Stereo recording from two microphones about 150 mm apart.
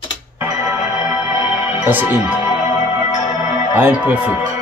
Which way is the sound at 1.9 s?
10° right (ahead or behind).